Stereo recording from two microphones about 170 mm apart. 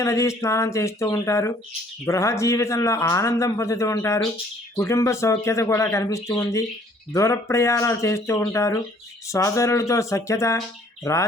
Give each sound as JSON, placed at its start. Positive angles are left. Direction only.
{"t": 0.0, "sound": "a man's voice", "side_deg": 15}